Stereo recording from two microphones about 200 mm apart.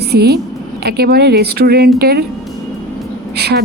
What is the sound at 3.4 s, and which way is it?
Speech, 55° right (ahead or behind).